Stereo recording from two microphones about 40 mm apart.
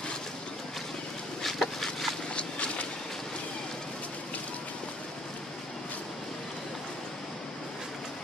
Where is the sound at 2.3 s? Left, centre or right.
Left.